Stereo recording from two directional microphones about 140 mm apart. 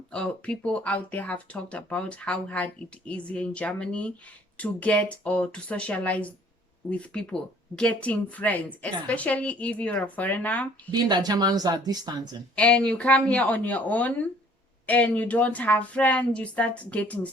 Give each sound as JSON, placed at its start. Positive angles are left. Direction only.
{"t": 0.1, "sound": "a woman's voice", "side_deg": 10}
{"t": 10.9, "sound": "speech", "side_deg": -30}
{"t": 12.5, "sound": "a woman's voice", "side_deg": 10}